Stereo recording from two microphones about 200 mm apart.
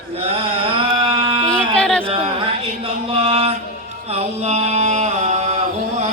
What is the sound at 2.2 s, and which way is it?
Music, 30° right (ahead or behind).